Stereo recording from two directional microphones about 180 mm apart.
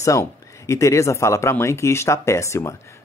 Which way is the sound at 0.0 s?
15° left (ahead or behind).